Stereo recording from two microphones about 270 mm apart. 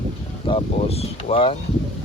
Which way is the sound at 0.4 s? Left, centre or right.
Left.